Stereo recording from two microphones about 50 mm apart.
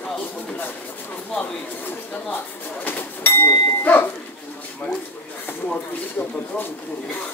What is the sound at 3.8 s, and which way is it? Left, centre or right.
Speech, left.